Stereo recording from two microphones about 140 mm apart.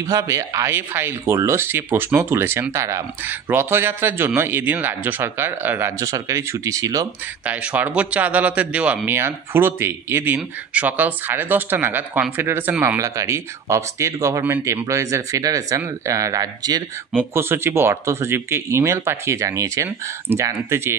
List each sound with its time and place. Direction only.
0.0 s speech: 20° right (ahead or behind)
7.4 s speech: 10° right (ahead or behind)